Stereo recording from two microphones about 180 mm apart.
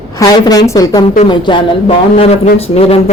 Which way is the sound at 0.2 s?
20° left (ahead or behind).